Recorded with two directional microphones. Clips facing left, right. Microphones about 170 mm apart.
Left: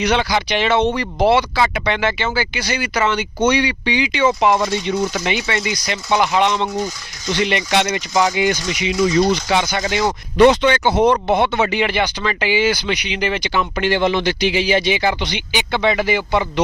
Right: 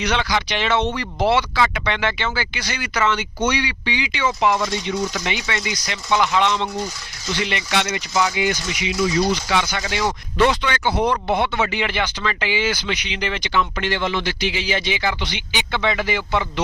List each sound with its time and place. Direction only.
0.0 s speech: 10° left (ahead or behind)
1.5 s speech: 35° left (ahead or behind)
2.0 s speech: 5° left (ahead or behind); by 5.6 s 30° left (ahead or behind)
5.9 s speech: 20° left (ahead or behind)
7.9 s speech: 40° left (ahead or behind)
10.3 s speech: 20° left (ahead or behind)